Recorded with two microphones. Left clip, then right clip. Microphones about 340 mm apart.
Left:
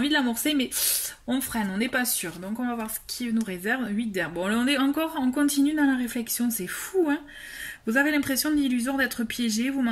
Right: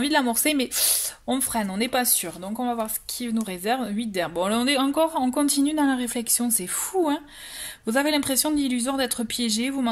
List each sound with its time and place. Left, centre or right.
0.0 s speech: centre
7.8 s speech: centre